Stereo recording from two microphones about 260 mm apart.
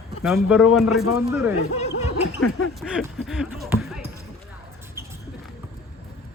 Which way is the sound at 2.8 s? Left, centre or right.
Centre.